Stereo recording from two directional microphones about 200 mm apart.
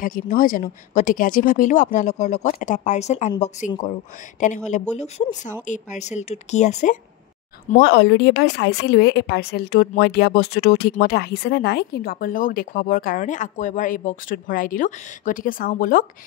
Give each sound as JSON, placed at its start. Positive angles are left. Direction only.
{"t": 0.0, "sound": "speech", "side_deg": 40}
{"t": 7.8, "sound": "a woman's voice", "side_deg": 55}